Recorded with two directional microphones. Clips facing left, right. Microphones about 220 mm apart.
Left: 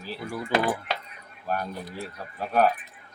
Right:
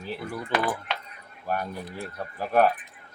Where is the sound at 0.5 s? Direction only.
30° left (ahead or behind).